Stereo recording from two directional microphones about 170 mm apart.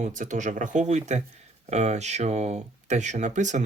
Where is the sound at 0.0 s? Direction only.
50° right (ahead or behind).